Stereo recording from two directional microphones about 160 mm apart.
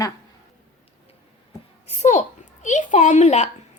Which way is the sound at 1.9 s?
45° left (ahead or behind).